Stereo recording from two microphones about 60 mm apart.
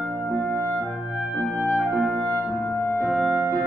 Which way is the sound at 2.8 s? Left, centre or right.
Left.